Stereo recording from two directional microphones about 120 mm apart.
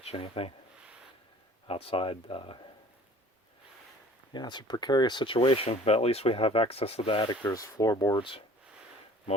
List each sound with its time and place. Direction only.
0.0 s speech: 55° left (ahead or behind)
1.6 s speech: 50° left (ahead or behind)
4.3 s speech: 40° left (ahead or behind)
7.4 s speech: 30° left (ahead or behind); by 8.4 s 45° left (ahead or behind)